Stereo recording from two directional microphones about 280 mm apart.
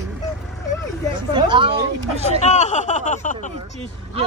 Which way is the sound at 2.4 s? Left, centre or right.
Left.